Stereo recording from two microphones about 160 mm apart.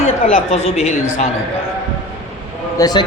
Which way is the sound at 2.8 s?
25° left (ahead or behind).